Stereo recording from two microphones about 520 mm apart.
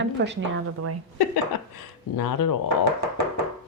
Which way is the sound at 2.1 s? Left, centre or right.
Left.